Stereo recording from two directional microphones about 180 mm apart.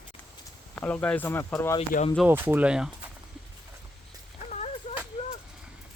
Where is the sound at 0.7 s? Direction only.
10° left (ahead or behind).